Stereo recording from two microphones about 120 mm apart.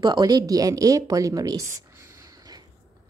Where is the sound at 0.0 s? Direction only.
35° right (ahead or behind).